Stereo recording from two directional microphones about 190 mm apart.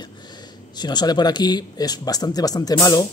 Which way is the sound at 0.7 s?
20° left (ahead or behind).